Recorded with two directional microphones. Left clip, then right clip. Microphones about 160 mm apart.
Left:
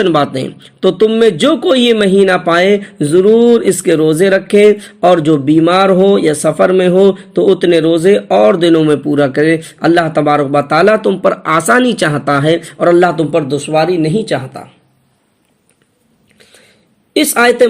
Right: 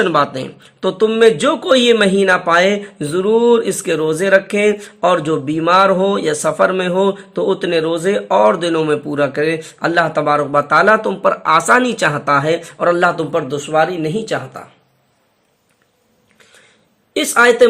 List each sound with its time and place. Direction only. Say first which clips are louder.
0.0 s speech: left 3 dB; 25° left (ahead or behind)
17.2 s a woman's voice: left 2 dB; 30° left (ahead or behind)